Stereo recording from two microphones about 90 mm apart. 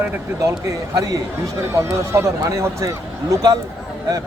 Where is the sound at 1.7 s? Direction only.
30° right (ahead or behind).